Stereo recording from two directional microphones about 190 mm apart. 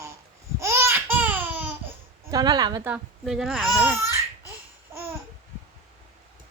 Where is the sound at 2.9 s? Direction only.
Centre (ahead or behind).